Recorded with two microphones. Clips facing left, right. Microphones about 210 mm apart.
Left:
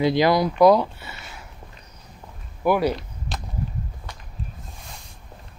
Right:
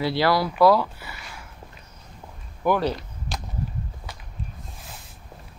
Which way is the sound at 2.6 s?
10° left (ahead or behind).